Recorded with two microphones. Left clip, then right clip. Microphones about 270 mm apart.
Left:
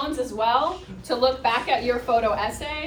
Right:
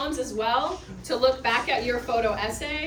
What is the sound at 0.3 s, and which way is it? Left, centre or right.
A woman's voice, centre.